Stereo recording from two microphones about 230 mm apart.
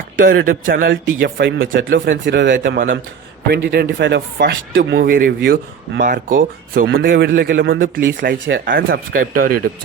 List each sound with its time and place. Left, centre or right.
0.2 s a man's voice: right